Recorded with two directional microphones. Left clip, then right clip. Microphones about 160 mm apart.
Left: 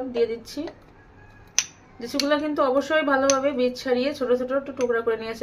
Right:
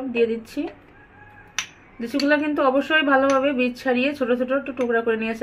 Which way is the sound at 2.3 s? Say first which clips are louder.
Right 3 dB; 35° right (ahead or behind).